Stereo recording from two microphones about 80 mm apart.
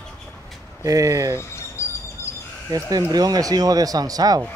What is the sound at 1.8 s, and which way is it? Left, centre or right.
Fowl, left.